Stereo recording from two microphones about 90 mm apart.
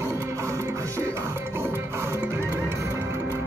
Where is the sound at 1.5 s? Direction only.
25° right (ahead or behind).